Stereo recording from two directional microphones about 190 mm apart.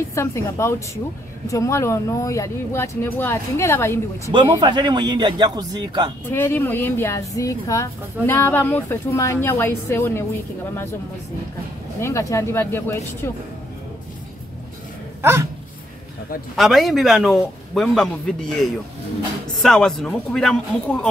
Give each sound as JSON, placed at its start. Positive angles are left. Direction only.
{"t": 0.1, "sound": "speech", "side_deg": 15}
{"t": 4.3, "sound": "a man's voice", "side_deg": -25}
{"t": 6.3, "sound": "speech", "side_deg": 10}
{"t": 12.0, "sound": "speech", "side_deg": 15}
{"t": 16.5, "sound": "a man's voice", "side_deg": 0}